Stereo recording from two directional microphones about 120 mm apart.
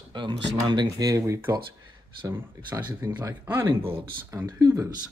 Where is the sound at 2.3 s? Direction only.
20° right (ahead or behind).